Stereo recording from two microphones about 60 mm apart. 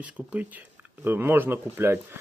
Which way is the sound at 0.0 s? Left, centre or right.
Right.